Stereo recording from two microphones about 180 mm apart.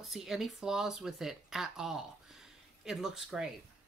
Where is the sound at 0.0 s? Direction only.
Centre (ahead or behind).